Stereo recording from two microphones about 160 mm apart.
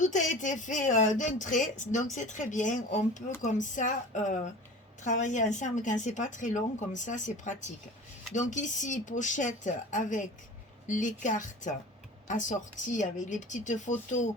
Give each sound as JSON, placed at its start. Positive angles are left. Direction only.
{"t": 0.0, "sound": "speech", "side_deg": 50}